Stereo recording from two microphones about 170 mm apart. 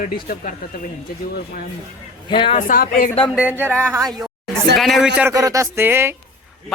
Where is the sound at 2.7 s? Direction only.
60° left (ahead or behind).